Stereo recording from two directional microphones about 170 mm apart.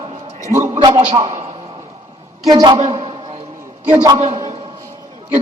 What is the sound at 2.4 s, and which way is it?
Speech, 25° right (ahead or behind).